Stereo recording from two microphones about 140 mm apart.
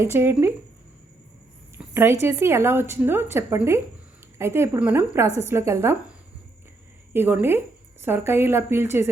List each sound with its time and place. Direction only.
0.0 s a woman's voice: 15° right (ahead or behind)
1.9 s a woman's voice: 15° right (ahead or behind)